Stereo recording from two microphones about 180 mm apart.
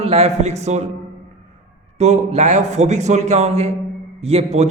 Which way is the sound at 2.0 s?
35° right (ahead or behind).